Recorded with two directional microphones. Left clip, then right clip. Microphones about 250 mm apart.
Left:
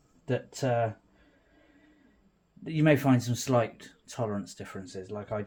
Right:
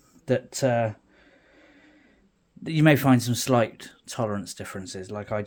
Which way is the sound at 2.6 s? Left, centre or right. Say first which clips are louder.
Right 4 dB; right.